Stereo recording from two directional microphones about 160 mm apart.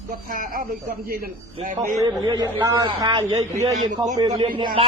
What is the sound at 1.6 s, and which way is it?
Speech, 55° right (ahead or behind).